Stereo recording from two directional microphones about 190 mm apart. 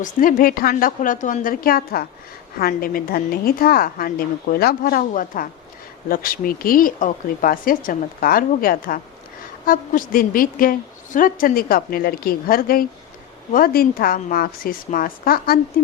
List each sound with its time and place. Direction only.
0.0 s a woman's voice: 45° left (ahead or behind)